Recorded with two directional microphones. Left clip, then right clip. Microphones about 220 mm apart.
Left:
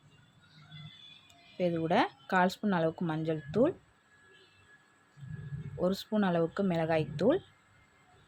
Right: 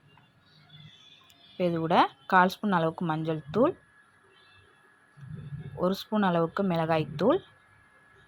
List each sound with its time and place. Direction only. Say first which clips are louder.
1.5 s speech: right 5 dB; 5° right (ahead or behind)
5.8 s speech: right 4 dB; 5° right (ahead or behind)